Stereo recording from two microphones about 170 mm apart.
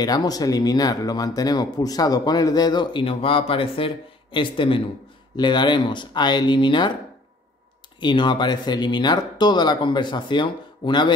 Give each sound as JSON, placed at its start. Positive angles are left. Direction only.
{"t": 0.0, "sound": "speech", "side_deg": 25}
{"t": 8.0, "sound": "speech", "side_deg": 25}